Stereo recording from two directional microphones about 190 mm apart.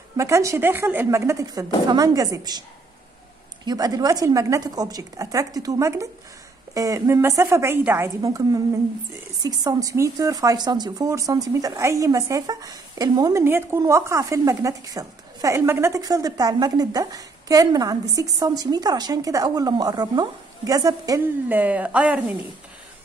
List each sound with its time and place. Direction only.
0.2 s a woman's voice: 15° right (ahead or behind)
3.6 s a woman's voice: 20° right (ahead or behind)